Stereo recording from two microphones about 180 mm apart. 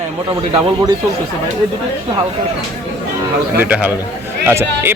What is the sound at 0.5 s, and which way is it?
Speech, 20° right (ahead or behind).